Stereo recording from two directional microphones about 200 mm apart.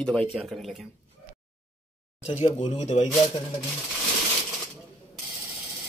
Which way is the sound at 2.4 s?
30° left (ahead or behind).